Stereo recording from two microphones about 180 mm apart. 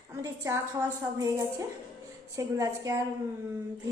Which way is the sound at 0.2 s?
15° right (ahead or behind).